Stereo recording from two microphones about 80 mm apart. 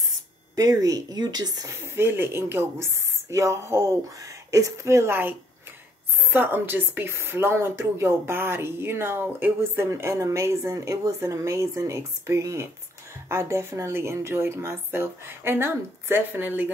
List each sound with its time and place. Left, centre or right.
0.6 s speech: right
1.7 s speech: right
6.3 s speech: right